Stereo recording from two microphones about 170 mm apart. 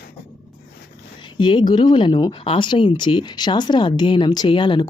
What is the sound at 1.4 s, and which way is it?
A woman's voice, 25° left (ahead or behind).